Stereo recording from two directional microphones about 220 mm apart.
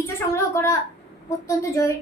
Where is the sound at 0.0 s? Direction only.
10° left (ahead or behind).